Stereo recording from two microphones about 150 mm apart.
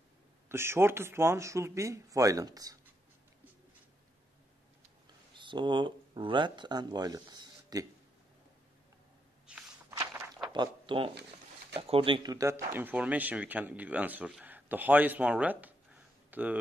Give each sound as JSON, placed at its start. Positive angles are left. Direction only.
{"t": 0.5, "sound": "speech", "side_deg": -15}
{"t": 5.3, "sound": "speech", "side_deg": -30}
{"t": 9.5, "sound": "a sound", "side_deg": -5}
{"t": 9.8, "sound": "walk", "side_deg": -20}
{"t": 10.5, "sound": "speech", "side_deg": -30}